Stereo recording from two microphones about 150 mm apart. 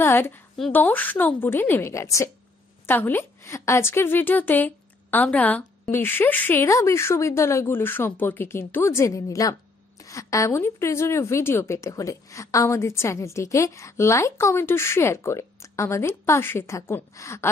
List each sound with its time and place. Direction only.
0.0 s a woman's voice: 15° left (ahead or behind)